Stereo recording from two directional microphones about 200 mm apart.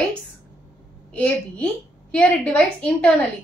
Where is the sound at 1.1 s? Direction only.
5° left (ahead or behind).